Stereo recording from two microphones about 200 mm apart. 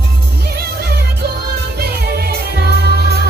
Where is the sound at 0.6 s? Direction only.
50° right (ahead or behind).